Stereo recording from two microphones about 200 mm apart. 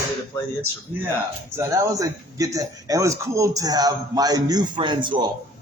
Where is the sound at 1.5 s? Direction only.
15° right (ahead or behind).